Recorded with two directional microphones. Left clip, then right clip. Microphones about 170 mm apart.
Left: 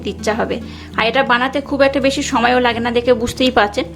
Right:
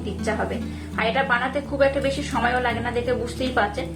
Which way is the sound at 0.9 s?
70° left (ahead or behind).